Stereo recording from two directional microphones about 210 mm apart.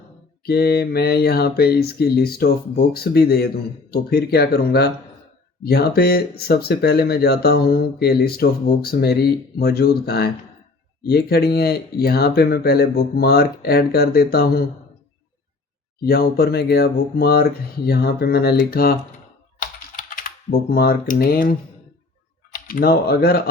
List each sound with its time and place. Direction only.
0.4 s speech: 50° left (ahead or behind)
16.0 s speech: 45° left (ahead or behind)
20.0 s speech: 40° left (ahead or behind)
22.6 s speech: 45° left (ahead or behind)